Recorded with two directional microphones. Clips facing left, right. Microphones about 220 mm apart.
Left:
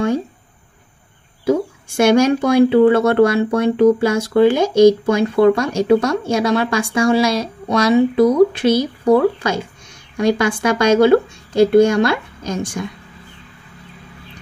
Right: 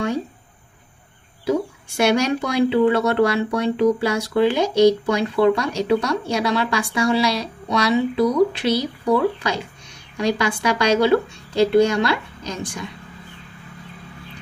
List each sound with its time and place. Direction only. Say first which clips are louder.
2.0 s speech: left 6 dB; 50° left (ahead or behind)